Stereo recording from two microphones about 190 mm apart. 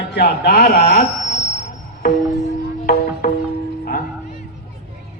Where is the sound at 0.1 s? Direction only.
60° left (ahead or behind).